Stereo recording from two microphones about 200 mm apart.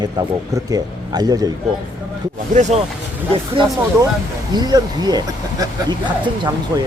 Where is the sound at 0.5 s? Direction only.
20° right (ahead or behind).